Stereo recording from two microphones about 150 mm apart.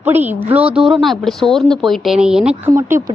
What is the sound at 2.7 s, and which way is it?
Speech, 20° right (ahead or behind).